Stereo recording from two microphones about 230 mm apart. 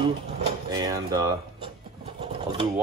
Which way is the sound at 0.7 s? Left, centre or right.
Centre.